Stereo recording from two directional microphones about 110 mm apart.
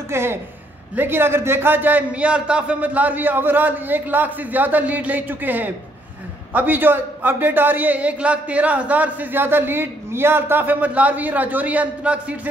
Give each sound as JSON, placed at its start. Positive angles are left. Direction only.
{"t": 0.1, "sound": "a man's voice", "side_deg": -20}